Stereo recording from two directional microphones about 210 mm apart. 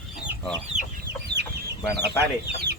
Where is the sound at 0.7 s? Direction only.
35° right (ahead or behind).